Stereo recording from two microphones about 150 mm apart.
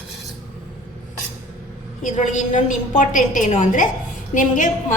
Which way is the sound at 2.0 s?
55° left (ahead or behind).